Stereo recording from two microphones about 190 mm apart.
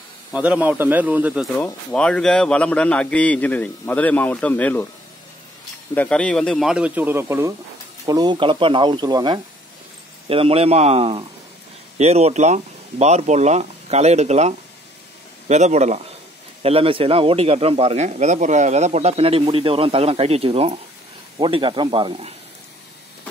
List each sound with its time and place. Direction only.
0.3 s speech: 5° right (ahead or behind)
1.6 s a man's voice: 5° left (ahead or behind)
5.9 s speech: 5° left (ahead or behind); by 22.3 s 25° right (ahead or behind)